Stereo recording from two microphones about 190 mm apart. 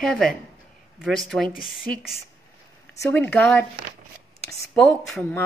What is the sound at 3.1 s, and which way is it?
Speech, 10° left (ahead or behind).